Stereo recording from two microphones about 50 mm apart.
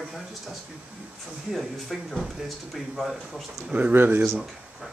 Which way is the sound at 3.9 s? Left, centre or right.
Right.